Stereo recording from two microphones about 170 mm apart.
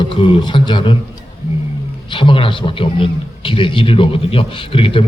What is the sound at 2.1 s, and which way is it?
A man's voice, 30° left (ahead or behind).